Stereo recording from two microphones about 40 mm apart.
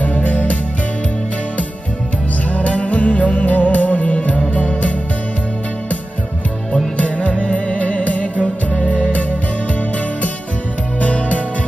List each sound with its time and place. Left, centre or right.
0.0 s music: left
2.5 s music: left
7.0 s music: left
11.0 s music: left